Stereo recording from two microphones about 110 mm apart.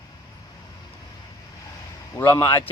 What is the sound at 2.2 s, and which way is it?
Speech, 25° left (ahead or behind).